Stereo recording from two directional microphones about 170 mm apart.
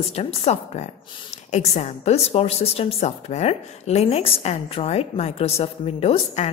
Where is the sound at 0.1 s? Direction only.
35° left (ahead or behind).